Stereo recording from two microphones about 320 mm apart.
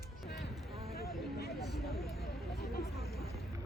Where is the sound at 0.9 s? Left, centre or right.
Left.